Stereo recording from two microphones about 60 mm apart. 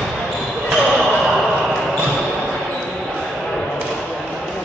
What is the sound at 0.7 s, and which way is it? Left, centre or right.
Basketball bounce, centre.